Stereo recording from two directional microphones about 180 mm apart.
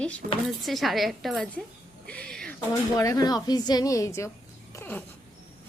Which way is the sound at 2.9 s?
20° left (ahead or behind).